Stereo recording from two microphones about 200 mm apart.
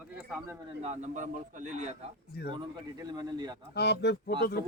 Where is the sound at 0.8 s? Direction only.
35° right (ahead or behind).